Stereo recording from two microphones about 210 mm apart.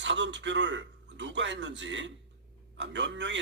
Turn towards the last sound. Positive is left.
turn(degrees=-60)  # may be behind; listen again after turning